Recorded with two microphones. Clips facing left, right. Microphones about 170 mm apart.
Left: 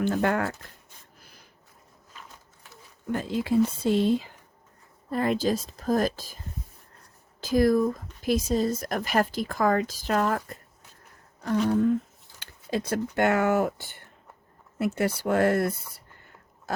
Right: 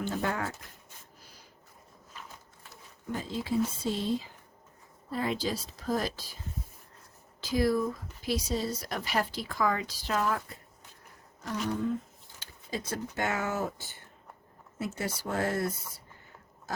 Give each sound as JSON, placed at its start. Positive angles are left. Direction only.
{"t": 0.0, "sound": "speech", "side_deg": 65}
{"t": 3.1, "sound": "speech", "side_deg": 65}
{"t": 7.4, "sound": "speech", "side_deg": 45}
{"t": 12.4, "sound": "speech", "side_deg": 60}
{"t": 16.7, "sound": "pig", "side_deg": 60}